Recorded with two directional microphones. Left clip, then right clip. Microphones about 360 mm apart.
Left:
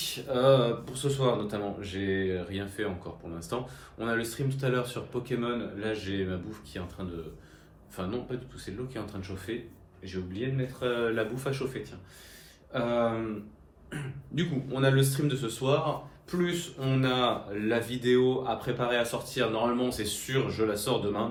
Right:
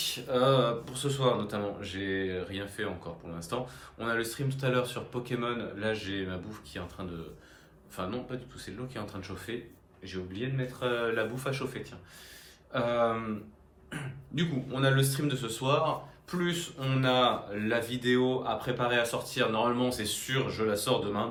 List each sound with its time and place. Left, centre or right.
0.0 s speech: centre
7.9 s speech: centre